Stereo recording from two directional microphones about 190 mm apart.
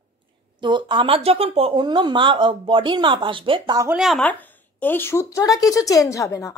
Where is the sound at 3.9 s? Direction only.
Centre (ahead or behind).